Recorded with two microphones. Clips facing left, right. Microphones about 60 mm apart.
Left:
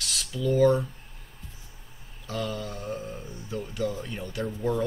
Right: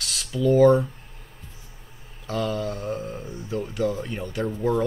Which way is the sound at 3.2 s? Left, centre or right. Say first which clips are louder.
Right 5 dB; centre.